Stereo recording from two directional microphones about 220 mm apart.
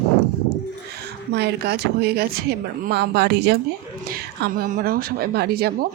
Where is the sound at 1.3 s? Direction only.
50° right (ahead or behind).